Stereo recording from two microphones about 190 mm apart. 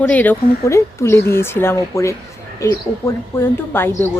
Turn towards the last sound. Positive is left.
turn(degrees=10)  # may be behind; listen again after turning